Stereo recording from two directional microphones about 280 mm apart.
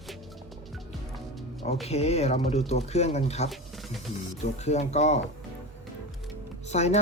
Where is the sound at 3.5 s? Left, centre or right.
Centre.